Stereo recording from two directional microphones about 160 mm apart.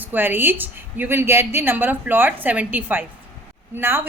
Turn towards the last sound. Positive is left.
turn(degrees=-15)  # may be behind; listen again after turning